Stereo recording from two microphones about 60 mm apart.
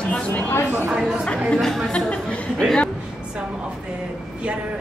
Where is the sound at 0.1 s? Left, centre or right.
Centre.